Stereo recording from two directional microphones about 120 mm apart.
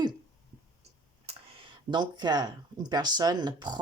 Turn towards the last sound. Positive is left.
turn(degrees=-40)  # may be behind; listen again after turning